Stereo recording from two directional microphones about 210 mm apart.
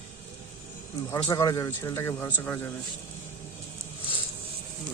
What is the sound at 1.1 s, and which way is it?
Speech, 15° left (ahead or behind).